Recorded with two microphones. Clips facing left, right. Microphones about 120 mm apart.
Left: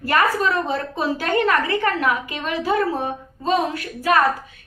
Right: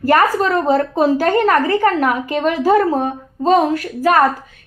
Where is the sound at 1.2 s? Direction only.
40° right (ahead or behind); by 3.6 s 55° right (ahead or behind).